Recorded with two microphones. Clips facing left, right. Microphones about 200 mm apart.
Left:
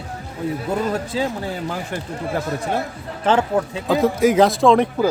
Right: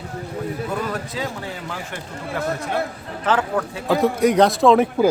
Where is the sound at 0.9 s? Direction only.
30° left (ahead or behind).